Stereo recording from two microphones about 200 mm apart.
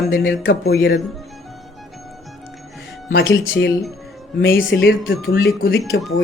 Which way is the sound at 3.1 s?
65° left (ahead or behind).